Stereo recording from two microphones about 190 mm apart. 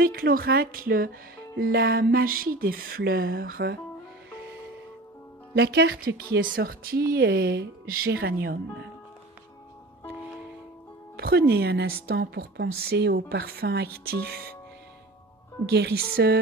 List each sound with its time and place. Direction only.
0.0 s speech: 50° right (ahead or behind)
5.5 s speech: 60° right (ahead or behind)
11.1 s speech: 55° right (ahead or behind)
15.7 s speech: 60° right (ahead or behind)